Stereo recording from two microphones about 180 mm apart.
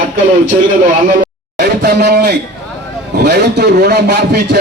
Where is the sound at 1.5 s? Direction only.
65° right (ahead or behind).